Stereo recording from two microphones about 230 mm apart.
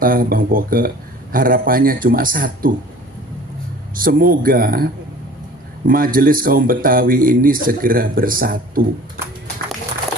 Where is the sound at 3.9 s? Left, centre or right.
Right.